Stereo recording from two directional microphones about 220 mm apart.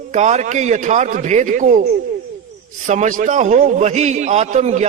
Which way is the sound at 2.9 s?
35° right (ahead or behind).